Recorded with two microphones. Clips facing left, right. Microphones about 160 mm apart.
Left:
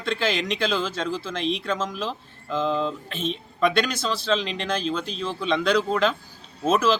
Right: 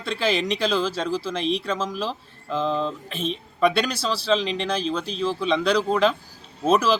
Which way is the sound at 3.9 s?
35° right (ahead or behind).